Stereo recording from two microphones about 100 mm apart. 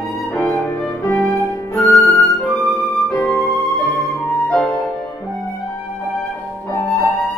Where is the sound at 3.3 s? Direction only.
35° left (ahead or behind).